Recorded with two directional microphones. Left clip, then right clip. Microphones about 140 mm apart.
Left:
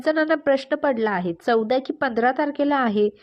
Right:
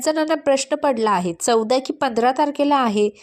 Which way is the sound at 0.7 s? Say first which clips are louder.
Right 3 dB; 15° right (ahead or behind).